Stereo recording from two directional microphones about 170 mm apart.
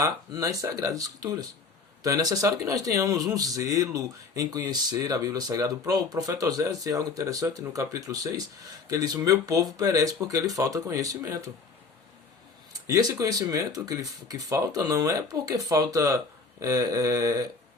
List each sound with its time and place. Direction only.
0.0 s a man's voice: 20° right (ahead or behind)
12.7 s a man's voice: 20° right (ahead or behind)